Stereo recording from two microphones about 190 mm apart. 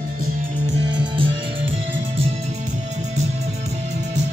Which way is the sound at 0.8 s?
25° right (ahead or behind).